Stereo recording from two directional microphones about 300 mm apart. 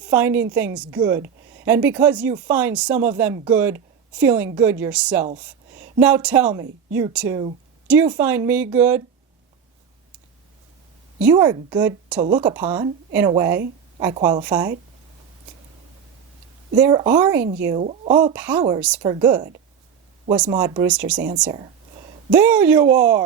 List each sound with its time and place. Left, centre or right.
0.0 s a woman's voice: centre
11.2 s a woman's voice: centre
16.7 s a woman's voice: centre
17.7 s speech: right
18.3 s a woman's voice: centre
20.5 s a woman's voice: centre